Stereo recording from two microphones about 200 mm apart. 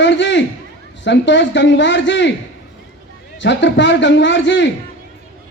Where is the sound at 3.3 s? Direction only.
65° left (ahead or behind).